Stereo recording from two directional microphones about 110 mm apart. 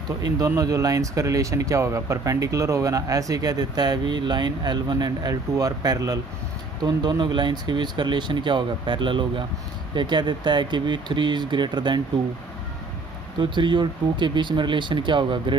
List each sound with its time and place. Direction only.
0.2 s speech: 35° right (ahead or behind)
13.4 s speech: 45° right (ahead or behind)